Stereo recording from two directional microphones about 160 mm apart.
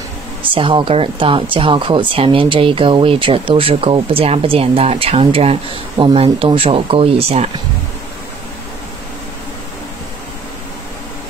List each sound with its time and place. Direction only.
0.5 s speech: 30° right (ahead or behind)